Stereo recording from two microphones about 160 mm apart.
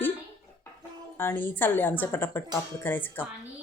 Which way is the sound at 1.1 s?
10° left (ahead or behind).